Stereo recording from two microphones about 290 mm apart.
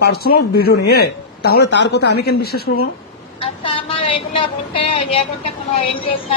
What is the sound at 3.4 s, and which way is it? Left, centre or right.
Speech, centre.